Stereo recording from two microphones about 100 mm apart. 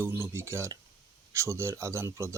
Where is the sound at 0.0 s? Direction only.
25° right (ahead or behind).